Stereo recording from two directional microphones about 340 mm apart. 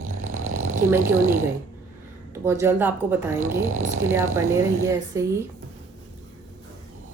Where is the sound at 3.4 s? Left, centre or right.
Right.